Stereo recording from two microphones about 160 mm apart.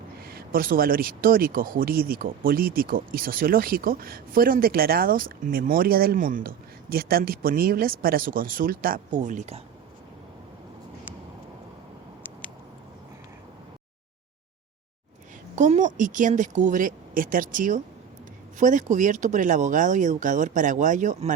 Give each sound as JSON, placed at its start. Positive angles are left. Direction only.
{"t": 0.2, "sound": "speech", "side_deg": -75}
{"t": 6.9, "sound": "speech", "side_deg": -70}
{"t": 15.5, "sound": "speech", "side_deg": -50}